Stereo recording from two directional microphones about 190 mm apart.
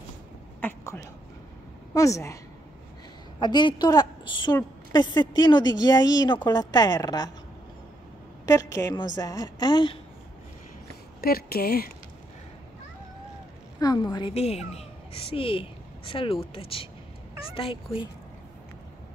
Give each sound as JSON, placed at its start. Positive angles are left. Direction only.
{"t": 0.6, "sound": "a woman's voice", "side_deg": 10}
{"t": 3.3, "sound": "speech", "side_deg": 25}
{"t": 8.5, "sound": "speech", "side_deg": 15}
{"t": 11.1, "sound": "speech", "side_deg": 50}
{"t": 13.7, "sound": "a woman's voice", "side_deg": 20}